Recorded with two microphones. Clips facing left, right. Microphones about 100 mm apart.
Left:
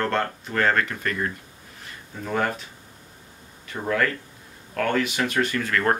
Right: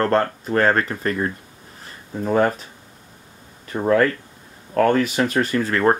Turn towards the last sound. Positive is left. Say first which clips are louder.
# right 5 dB
turn(degrees=-30)  # may be behind; listen again after turning